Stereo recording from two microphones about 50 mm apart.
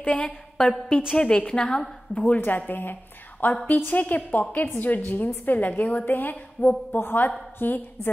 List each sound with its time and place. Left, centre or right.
0.0 s a woman's voice: left
2.4 s a woman's voice: left